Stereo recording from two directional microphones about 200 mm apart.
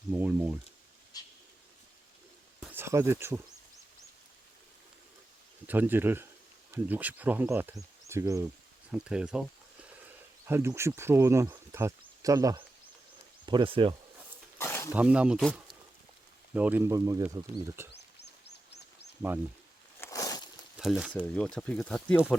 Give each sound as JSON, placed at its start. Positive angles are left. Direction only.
{"t": 0.1, "sound": "speech", "side_deg": -5}
{"t": 1.1, "sound": "bird", "side_deg": 20}
{"t": 2.6, "sound": "speech", "side_deg": -10}
{"t": 5.6, "sound": "speech", "side_deg": -10}
{"t": 8.9, "sound": "speech", "side_deg": -5}
{"t": 10.4, "sound": "speech", "side_deg": -15}
{"t": 14.6, "sound": "a sound", "side_deg": 15}
{"t": 14.9, "sound": "speech", "side_deg": -5}
{"t": 18.2, "sound": "bird", "side_deg": 55}
{"t": 20.0, "sound": "a sound", "side_deg": 15}
{"t": 20.7, "sound": "speech", "side_deg": -5}